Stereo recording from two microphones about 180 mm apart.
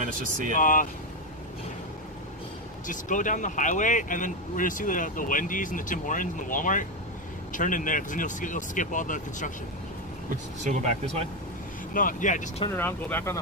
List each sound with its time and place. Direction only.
0.0 s speech: 50° right (ahead or behind)
0.6 s speech: 50° left (ahead or behind)
2.9 s speech: 45° left (ahead or behind)
10.3 s speech: 40° right (ahead or behind)
11.9 s speech: 50° left (ahead or behind)
12.7 s speech: 10° left (ahead or behind)